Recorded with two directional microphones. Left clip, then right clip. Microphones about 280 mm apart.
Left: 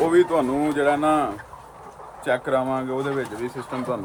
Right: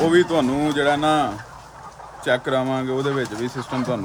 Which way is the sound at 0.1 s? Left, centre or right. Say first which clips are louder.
Right 1 dB; right.